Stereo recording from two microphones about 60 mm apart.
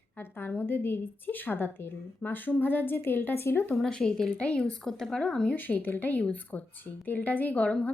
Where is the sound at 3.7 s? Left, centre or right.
Centre.